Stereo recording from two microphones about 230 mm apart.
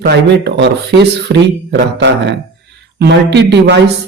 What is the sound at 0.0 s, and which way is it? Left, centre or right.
Speech, right.